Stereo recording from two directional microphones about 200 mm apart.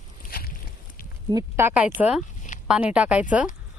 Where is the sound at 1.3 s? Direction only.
10° right (ahead or behind).